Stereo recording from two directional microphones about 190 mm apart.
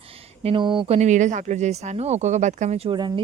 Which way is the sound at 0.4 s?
25° right (ahead or behind).